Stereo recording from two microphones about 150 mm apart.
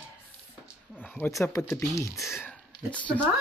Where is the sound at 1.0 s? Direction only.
15° left (ahead or behind).